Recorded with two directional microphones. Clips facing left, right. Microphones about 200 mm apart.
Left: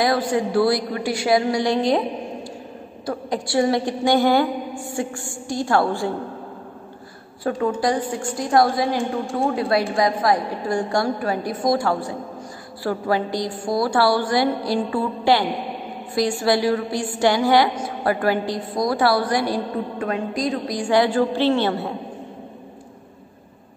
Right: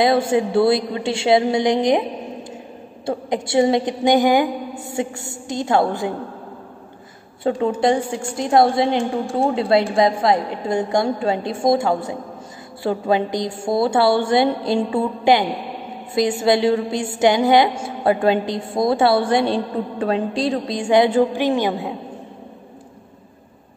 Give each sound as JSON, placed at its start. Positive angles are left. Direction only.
{"t": 0.0, "sound": "a woman's voice", "side_deg": -25}
{"t": 3.1, "sound": "a woman's voice", "side_deg": -20}
{"t": 7.4, "sound": "a woman's voice", "side_deg": -25}